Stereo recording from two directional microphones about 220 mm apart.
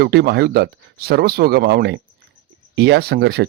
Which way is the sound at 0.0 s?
50° right (ahead or behind).